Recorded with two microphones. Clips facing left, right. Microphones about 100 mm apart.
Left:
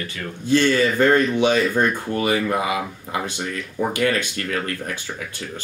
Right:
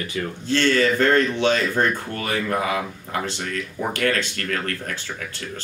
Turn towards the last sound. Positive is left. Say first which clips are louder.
# left 1 dB
turn(degrees=15)  # may be behind; listen again after turning